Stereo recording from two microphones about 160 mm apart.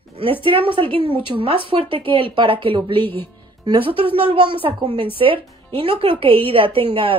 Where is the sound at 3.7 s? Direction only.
35° right (ahead or behind).